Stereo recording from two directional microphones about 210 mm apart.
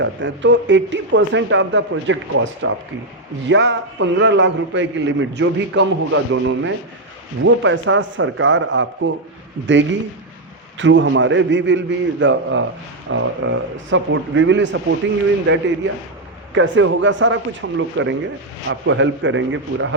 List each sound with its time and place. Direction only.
0.0 s a man's voice: 60° right (ahead or behind)
10.8 s a man's voice: 60° right (ahead or behind)